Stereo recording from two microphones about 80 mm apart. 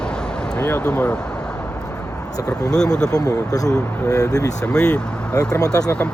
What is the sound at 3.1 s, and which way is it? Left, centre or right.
Speech, left.